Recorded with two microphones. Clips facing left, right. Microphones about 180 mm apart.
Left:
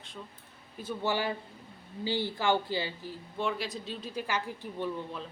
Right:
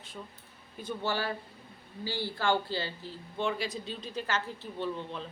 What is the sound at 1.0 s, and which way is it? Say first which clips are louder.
Speech: left 2 dB; 15° left (ahead or behind).